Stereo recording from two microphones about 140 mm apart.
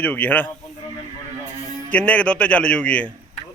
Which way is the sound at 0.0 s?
10° left (ahead or behind).